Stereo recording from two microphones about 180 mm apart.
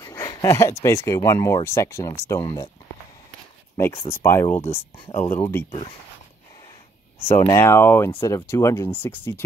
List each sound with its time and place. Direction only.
0.0 s speech: 20° left (ahead or behind)
2.4 s speech: 30° left (ahead or behind)
3.7 s speech: 15° left (ahead or behind)
7.2 s speech: 15° left (ahead or behind)